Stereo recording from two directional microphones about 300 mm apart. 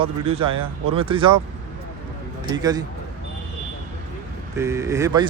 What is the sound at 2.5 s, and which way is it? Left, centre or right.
Speech, centre.